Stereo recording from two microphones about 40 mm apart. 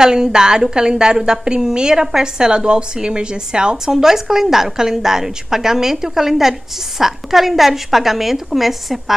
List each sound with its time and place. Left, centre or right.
0.0 s a woman's voice: centre